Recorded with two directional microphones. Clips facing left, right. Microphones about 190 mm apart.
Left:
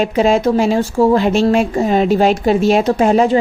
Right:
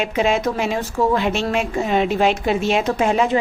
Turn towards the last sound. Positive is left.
turn(degrees=35)  # may be behind; listen again after turning